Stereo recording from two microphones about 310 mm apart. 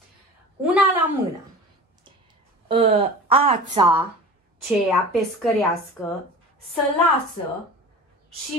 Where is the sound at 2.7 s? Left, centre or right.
Centre.